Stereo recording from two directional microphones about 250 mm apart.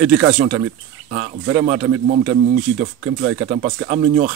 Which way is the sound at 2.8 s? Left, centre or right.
Right.